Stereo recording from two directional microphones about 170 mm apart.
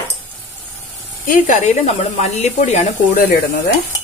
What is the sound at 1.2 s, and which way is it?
Speech, 45° left (ahead or behind).